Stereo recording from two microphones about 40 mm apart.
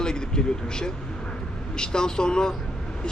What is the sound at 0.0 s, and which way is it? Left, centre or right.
A man's voice, centre.